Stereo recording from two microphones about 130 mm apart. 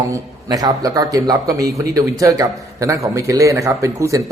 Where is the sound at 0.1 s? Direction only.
30° right (ahead or behind).